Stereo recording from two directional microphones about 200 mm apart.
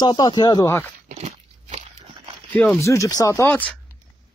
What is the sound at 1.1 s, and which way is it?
Biting, 30° right (ahead or behind).